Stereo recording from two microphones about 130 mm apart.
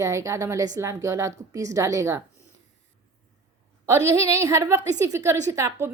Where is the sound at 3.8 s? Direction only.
20° right (ahead or behind).